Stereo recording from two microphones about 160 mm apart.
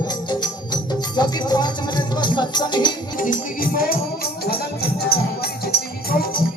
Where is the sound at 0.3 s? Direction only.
25° left (ahead or behind).